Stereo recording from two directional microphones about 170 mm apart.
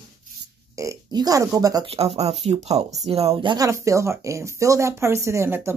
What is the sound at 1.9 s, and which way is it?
Speech, 35° right (ahead or behind).